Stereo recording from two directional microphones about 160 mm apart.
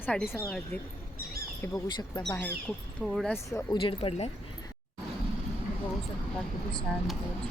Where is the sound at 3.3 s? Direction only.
20° left (ahead or behind).